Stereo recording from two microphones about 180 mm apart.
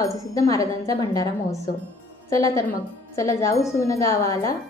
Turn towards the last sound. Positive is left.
turn(degrees=20)  # may be behind; listen again after turning